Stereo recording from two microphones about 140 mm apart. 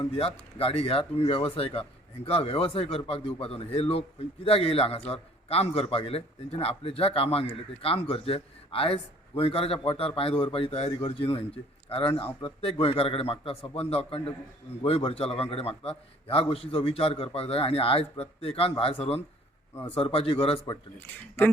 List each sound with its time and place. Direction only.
0.0 s speech: 40° left (ahead or behind)